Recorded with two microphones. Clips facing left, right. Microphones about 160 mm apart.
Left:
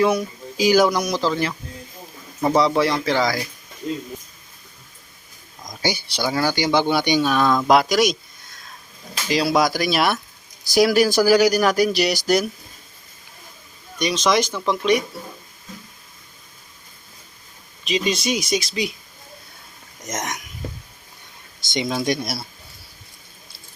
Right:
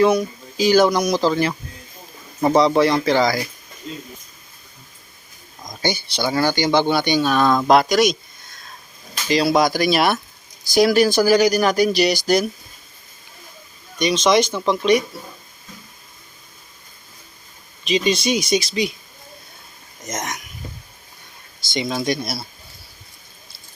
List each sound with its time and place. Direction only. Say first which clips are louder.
0.0 s speech: right 3 dB; 5° left (ahead or behind)
2.6 s speech: right 3 dB; centre (ahead or behind)
5.8 s speech: right 1 dB; 10° left (ahead or behind)
7.4 s speech: right 2 dB; 10° right (ahead or behind)
7.7 s speech: right 2 dB; 5° left (ahead or behind)
9.3 s speech: right 2 dB; 5° left (ahead or behind)
14.0 s speech: right 3 dB; centre (ahead or behind)
17.8 s speech: right 3 dB; centre (ahead or behind)
21.6 s speech: even; 20° left (ahead or behind)